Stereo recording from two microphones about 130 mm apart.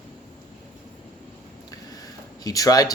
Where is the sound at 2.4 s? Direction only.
30° left (ahead or behind).